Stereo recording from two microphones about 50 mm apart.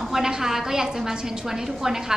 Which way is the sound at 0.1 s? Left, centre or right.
Centre.